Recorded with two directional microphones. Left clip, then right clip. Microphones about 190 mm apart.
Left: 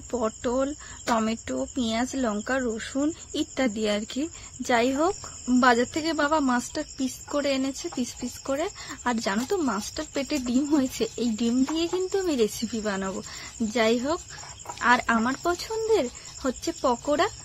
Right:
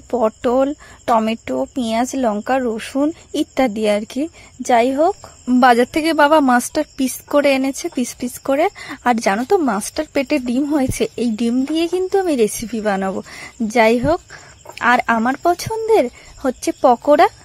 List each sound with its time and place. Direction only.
0.1 s speech: 40° right (ahead or behind)
5.5 s a woman's voice: 50° right (ahead or behind)